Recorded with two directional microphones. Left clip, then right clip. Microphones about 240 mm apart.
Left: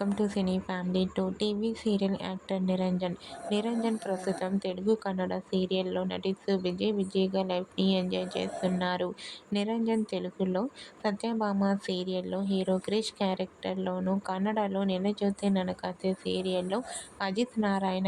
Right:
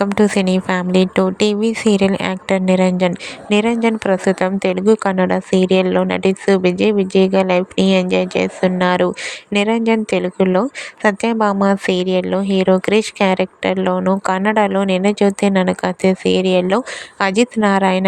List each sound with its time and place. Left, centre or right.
0.2 s speech: right